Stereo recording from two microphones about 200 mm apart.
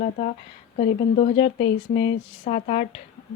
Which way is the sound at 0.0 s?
35° left (ahead or behind).